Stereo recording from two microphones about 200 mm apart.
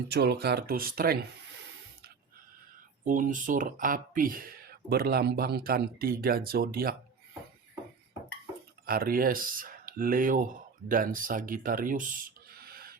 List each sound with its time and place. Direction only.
0.1 s speech: 55° right (ahead or behind)
3.0 s speech: 40° right (ahead or behind)
8.9 s speech: 45° right (ahead or behind)